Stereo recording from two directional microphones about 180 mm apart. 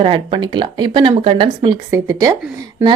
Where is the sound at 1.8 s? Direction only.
15° right (ahead or behind).